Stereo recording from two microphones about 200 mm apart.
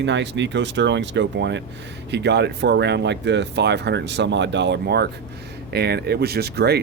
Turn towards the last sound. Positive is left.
turn(degrees=-55)  # may be behind; listen again after turning